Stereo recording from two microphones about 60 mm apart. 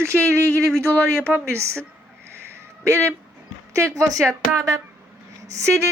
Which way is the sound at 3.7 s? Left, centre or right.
Right.